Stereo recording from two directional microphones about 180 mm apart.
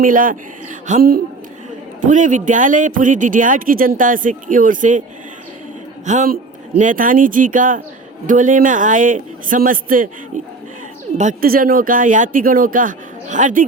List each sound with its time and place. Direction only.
0.0 s speech: 50° right (ahead or behind)
6.1 s speech: 50° right (ahead or behind)